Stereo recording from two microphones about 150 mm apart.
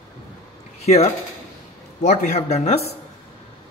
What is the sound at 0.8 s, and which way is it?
Speech, 45° left (ahead or behind).